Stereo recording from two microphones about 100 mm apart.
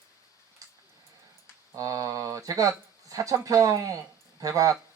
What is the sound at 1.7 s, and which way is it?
Speech, 35° right (ahead or behind).